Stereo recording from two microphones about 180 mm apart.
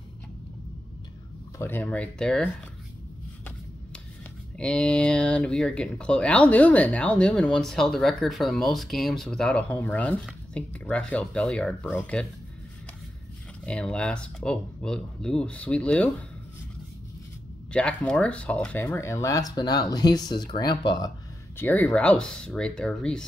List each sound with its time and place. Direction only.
1.6 s speech: 10° left (ahead or behind)
4.6 s speech: 5° left (ahead or behind)
13.7 s speech: 5° left (ahead or behind)
17.7 s speech: 5° left (ahead or behind); by 21.1 s 25° left (ahead or behind)
21.5 s speech: 10° left (ahead or behind)